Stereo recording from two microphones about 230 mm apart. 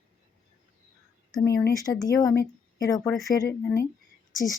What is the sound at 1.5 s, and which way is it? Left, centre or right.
Speech, centre.